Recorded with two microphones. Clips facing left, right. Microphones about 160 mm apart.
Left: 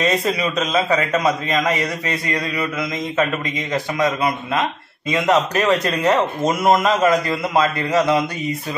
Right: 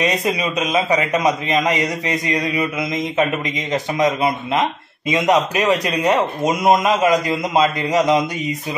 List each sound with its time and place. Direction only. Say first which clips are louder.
0.0 s a man's voice: even; 15° right (ahead or behind)